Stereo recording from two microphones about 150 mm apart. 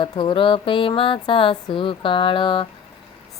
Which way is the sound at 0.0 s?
35° left (ahead or behind).